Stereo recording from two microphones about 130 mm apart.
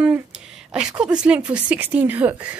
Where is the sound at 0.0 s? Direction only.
5° right (ahead or behind).